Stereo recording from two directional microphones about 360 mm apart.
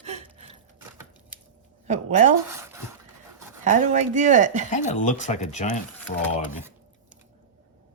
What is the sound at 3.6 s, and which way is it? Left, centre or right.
Speech, centre.